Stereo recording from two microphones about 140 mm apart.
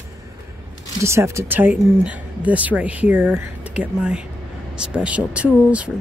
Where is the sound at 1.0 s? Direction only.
20° right (ahead or behind).